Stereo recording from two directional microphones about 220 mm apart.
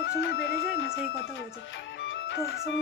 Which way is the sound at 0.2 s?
65° left (ahead or behind).